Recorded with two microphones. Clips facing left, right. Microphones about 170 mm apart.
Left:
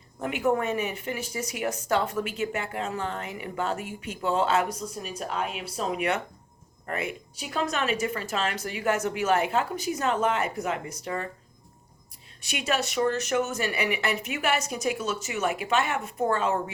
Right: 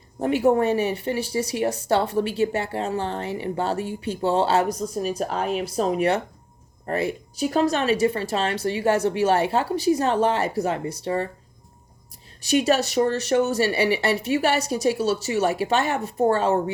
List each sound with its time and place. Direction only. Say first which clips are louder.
0.2 s speech: right 7 dB; 35° right (ahead or behind)
12.4 s speech: right 9 dB; 35° right (ahead or behind)